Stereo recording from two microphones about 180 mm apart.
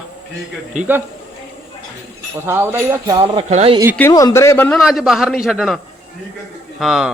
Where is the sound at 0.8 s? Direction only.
10° right (ahead or behind).